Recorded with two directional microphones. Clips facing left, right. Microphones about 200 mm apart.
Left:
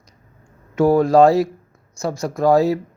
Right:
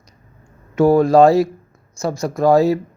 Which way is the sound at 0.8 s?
30° right (ahead or behind).